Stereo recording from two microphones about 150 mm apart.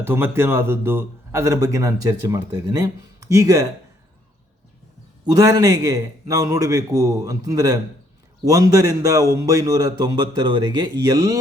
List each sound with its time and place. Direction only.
0.0 s a man's voice: 15° right (ahead or behind)
5.2 s a man's voice: 25° right (ahead or behind)